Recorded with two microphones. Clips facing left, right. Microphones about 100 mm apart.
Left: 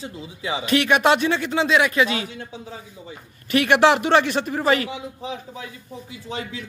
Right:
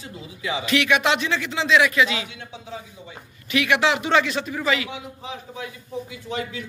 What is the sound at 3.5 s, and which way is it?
A man's voice, 50° left (ahead or behind).